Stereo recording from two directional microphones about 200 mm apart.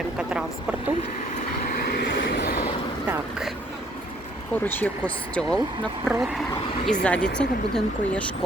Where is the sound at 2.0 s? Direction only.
60° left (ahead or behind).